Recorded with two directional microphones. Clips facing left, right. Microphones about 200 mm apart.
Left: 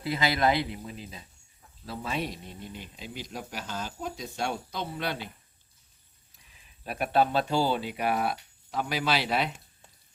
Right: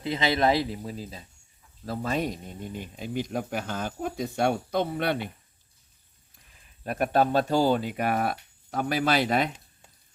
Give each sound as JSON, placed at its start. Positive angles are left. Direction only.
{"t": 0.0, "sound": "speech", "side_deg": -25}
{"t": 6.8, "sound": "speech", "side_deg": -45}